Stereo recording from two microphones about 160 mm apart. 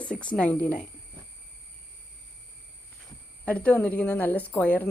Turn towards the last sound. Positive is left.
turn(degrees=10)  # may be behind; listen again after turning